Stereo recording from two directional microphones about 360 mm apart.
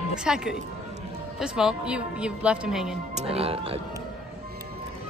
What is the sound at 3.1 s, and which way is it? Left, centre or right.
Speech, centre.